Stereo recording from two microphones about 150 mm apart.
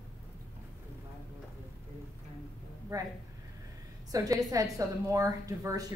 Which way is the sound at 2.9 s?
25° right (ahead or behind).